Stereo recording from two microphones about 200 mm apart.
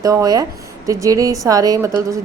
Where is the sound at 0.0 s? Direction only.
15° right (ahead or behind).